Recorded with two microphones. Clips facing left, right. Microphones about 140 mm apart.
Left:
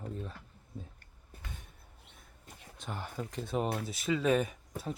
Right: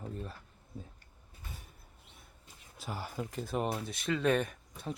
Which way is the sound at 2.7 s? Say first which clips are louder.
Right 1 dB; 5° right (ahead or behind).